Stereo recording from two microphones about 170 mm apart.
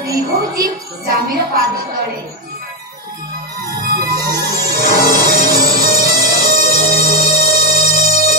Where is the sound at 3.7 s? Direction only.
60° right (ahead or behind).